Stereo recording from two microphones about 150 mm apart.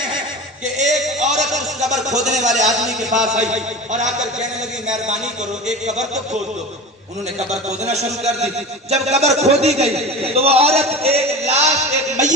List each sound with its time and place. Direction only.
0.8 s a sound: 50° right (ahead or behind)
1.9 s speech: 50° right (ahead or behind)
7.3 s speech: 45° right (ahead or behind)